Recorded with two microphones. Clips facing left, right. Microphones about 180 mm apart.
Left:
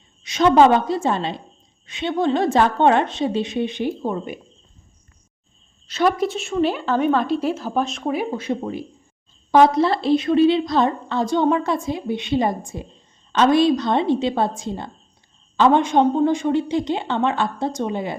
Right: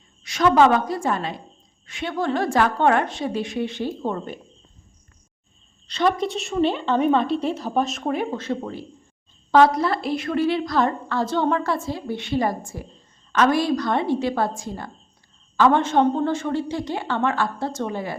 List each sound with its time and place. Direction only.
0.2 s a woman's voice: 20° left (ahead or behind)
5.9 s a woman's voice: 5° left (ahead or behind)